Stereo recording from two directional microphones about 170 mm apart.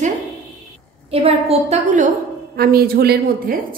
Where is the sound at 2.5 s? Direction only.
65° right (ahead or behind).